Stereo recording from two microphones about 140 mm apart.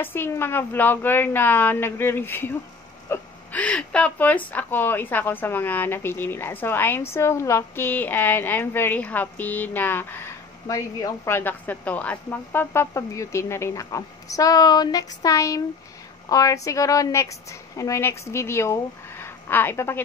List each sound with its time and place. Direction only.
0.0 s speech: 15° left (ahead or behind)
10.7 s a woman's voice: 25° left (ahead or behind)